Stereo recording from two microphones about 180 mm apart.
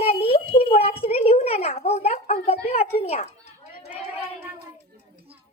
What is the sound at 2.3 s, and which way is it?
Speech, 40° left (ahead or behind).